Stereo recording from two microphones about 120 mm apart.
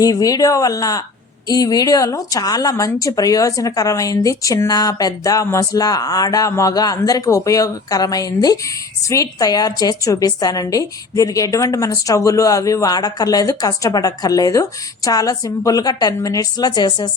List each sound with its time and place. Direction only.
0.0 s speech: 30° left (ahead or behind)